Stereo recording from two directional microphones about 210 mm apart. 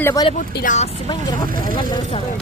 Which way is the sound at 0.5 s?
35° left (ahead or behind).